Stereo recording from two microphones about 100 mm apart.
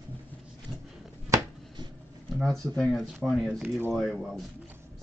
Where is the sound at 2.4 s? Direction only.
5° left (ahead or behind).